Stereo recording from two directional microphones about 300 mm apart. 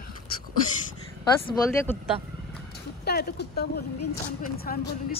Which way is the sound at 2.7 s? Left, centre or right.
Left.